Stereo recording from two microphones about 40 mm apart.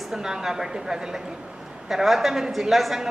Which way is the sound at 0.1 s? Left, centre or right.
Centre.